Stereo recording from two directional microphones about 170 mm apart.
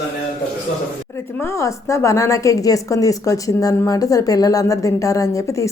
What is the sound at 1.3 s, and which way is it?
A woman's voice, 15° left (ahead or behind).